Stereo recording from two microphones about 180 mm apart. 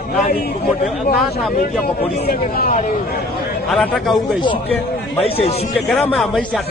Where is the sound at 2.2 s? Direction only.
55° left (ahead or behind).